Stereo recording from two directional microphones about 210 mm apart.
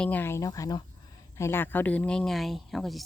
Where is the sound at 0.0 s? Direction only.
10° left (ahead or behind).